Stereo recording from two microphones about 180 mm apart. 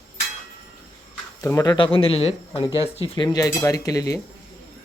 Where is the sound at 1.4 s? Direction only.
15° left (ahead or behind).